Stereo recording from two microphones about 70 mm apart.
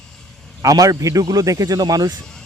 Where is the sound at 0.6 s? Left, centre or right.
Right.